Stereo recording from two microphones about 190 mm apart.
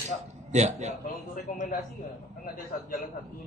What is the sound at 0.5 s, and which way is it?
Speech, 35° right (ahead or behind).